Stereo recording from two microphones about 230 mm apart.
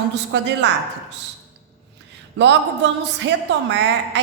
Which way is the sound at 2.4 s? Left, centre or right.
Right.